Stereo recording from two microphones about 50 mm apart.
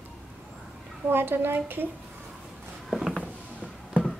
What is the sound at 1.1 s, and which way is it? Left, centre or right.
Speech, right.